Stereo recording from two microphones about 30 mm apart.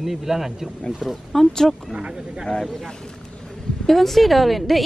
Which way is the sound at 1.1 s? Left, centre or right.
Centre.